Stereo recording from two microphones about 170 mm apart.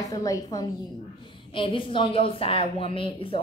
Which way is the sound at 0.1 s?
20° left (ahead or behind).